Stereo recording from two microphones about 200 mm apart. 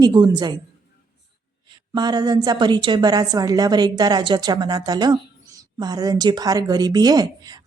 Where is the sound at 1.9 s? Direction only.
20° right (ahead or behind).